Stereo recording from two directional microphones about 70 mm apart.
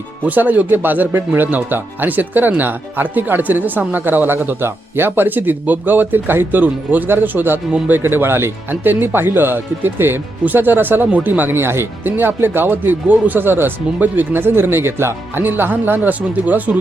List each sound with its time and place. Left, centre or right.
0.3 s speech: right